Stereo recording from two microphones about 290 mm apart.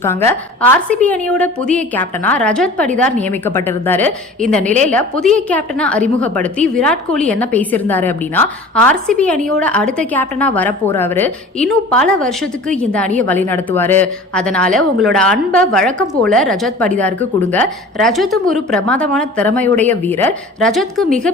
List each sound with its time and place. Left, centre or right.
0.0 s a woman's voice: centre